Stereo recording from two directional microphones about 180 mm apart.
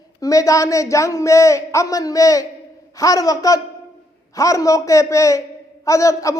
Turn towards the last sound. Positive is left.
turn(degrees=15)  # may be behind; listen again after turning